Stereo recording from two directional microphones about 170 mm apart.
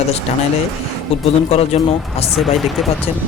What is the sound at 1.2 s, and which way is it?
Speech, 35° left (ahead or behind).